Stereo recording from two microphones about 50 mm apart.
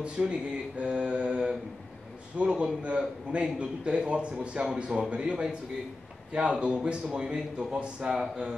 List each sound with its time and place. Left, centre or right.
0.0 s a man's voice: right